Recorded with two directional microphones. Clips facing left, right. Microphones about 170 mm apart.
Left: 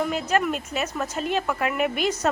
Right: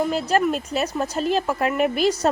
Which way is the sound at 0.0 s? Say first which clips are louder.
Right 3 dB; 35° right (ahead or behind).